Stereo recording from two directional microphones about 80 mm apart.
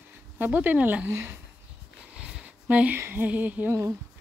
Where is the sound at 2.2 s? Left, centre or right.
Centre.